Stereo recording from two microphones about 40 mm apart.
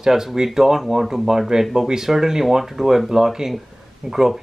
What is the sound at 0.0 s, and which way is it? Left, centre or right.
Speech, centre.